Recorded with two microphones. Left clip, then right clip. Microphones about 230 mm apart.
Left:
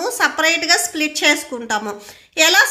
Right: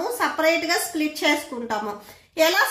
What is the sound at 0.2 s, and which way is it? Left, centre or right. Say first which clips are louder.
A woman's voice: left 5 dB; left.